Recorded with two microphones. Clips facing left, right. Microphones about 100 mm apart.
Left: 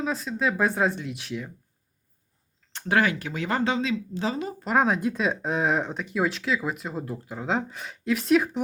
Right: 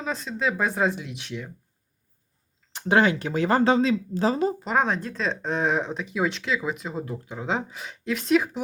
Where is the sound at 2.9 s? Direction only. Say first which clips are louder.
Right 3 dB; 25° right (ahead or behind).